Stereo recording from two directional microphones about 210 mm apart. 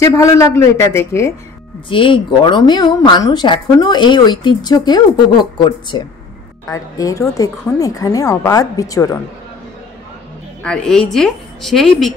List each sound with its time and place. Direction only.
0.0 s a woman's voice: 15° left (ahead or behind)
1.9 s a woman's voice: 25° left (ahead or behind)
10.6 s a woman's voice: 5° left (ahead or behind)